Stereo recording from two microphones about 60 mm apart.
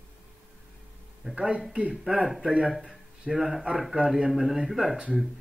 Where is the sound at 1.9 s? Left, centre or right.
Centre.